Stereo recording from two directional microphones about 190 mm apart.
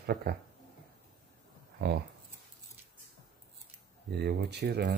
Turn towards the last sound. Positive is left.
turn(degrees=-60)  # may be behind; listen again after turning